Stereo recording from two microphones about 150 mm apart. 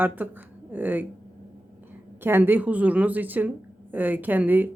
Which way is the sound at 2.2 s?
15° right (ahead or behind).